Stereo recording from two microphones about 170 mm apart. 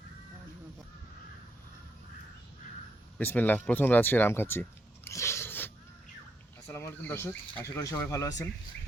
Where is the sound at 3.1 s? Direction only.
10° left (ahead or behind).